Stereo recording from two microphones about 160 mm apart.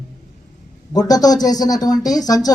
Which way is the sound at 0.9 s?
25° left (ahead or behind).